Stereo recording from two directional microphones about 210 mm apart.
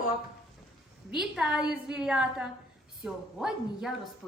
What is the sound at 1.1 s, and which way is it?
A woman's voice, 5° right (ahead or behind).